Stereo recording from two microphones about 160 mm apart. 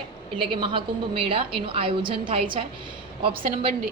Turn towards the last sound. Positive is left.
turn(degrees=-35)  # may be behind; listen again after turning